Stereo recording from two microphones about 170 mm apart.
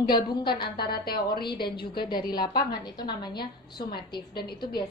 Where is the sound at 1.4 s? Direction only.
25° left (ahead or behind).